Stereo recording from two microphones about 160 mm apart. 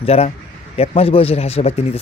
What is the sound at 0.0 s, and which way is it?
A man's voice, 40° left (ahead or behind).